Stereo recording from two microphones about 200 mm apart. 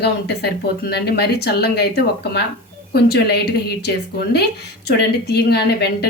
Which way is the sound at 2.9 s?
55° left (ahead or behind).